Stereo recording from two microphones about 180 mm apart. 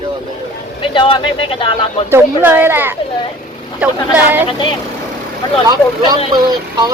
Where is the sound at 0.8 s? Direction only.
30° left (ahead or behind).